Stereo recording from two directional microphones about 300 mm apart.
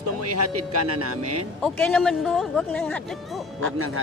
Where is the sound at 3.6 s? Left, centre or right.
Right.